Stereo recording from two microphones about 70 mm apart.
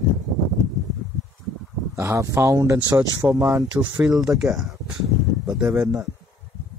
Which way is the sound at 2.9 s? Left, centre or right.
Right.